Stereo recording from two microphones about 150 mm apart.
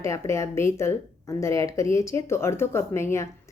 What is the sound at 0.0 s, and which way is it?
A woman's voice, 20° left (ahead or behind).